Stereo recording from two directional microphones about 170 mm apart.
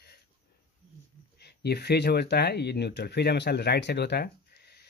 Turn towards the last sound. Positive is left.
turn(degrees=70)  # may be behind; listen again after turning